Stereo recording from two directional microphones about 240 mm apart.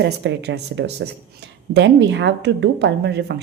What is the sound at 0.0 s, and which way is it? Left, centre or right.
A woman's voice, right.